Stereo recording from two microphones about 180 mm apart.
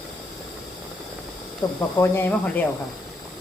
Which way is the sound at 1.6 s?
20° left (ahead or behind).